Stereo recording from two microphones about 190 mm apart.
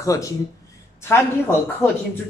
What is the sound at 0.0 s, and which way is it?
Speech, 15° left (ahead or behind).